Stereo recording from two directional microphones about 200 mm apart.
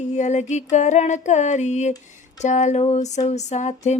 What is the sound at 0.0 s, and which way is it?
Female singing, 35° left (ahead or behind).